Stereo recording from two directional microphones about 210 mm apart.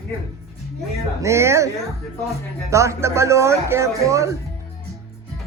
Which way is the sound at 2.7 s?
15° right (ahead or behind).